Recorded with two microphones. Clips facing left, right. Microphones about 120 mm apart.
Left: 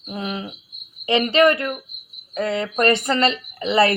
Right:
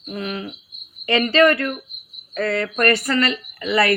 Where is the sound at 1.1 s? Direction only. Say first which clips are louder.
Even; 20° left (ahead or behind).